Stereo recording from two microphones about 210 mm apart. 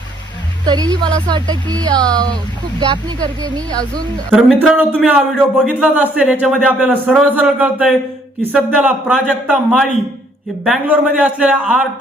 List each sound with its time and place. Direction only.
0.6 s speech: 20° right (ahead or behind)
3.4 s speech: 20° right (ahead or behind)
4.3 s a man's voice: centre (ahead or behind)